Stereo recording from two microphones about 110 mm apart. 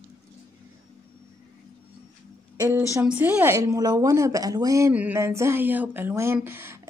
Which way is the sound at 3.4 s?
25° right (ahead or behind).